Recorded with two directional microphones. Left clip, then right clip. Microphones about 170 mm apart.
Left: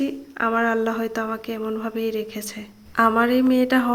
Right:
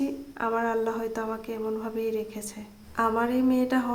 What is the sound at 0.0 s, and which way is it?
Speech, 15° left (ahead or behind).